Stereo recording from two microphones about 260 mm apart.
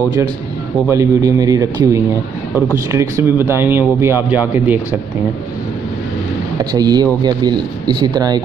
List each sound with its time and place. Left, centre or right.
0.8 s speech: centre
6.7 s speech: centre